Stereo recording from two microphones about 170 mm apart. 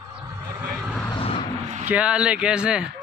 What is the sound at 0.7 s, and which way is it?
Vehicle, centre (ahead or behind).